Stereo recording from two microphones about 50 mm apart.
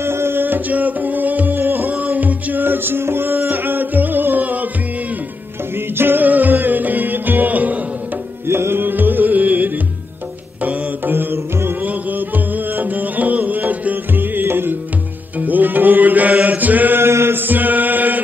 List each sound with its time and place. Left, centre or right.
0.0 s music: right
5.9 s music: right
8.5 s music: right
8.8 s music: right
15.3 s music: right
16.4 s chant: right
17.0 s chant: right